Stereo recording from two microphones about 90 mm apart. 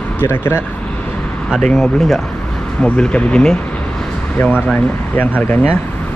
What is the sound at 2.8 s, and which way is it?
Speech, 10° left (ahead or behind).